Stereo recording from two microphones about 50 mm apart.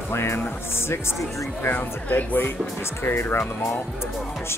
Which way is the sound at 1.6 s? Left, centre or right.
Left.